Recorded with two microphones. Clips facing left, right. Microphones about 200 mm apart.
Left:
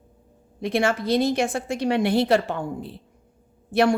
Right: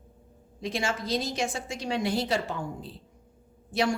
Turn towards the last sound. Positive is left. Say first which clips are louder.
# left 7 dB
turn(degrees=60)  # may be behind; listen again after turning